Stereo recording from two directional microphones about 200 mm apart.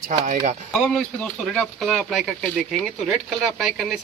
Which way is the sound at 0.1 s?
40° right (ahead or behind).